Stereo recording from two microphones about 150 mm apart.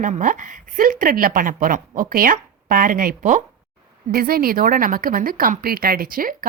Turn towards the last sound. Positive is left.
turn(degrees=-70)  # may be behind; listen again after turning